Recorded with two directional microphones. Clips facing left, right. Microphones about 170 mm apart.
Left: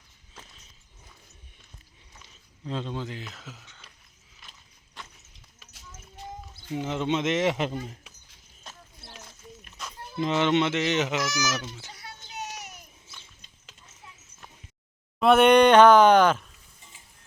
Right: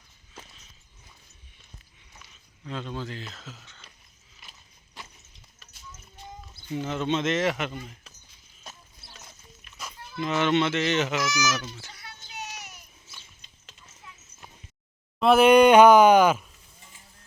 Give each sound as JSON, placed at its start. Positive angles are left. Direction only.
{"t": 2.3, "sound": "speech", "side_deg": 30}
{"t": 4.4, "sound": "horse", "side_deg": -5}
{"t": 6.7, "sound": "speech", "side_deg": 15}
{"t": 7.6, "sound": "speech", "side_deg": 35}
{"t": 8.7, "sound": "a sound", "side_deg": -10}
{"t": 9.7, "sound": "music", "side_deg": 50}
{"t": 10.3, "sound": "speech", "side_deg": 20}
{"t": 11.9, "sound": "a sound", "side_deg": 40}
{"t": 15.2, "sound": "speech", "side_deg": 0}